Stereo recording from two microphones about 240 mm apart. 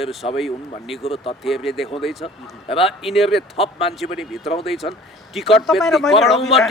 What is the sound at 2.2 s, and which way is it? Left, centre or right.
Speech, left.